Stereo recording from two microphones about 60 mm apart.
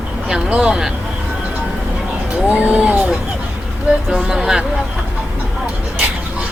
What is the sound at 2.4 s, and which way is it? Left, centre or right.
Speech, right.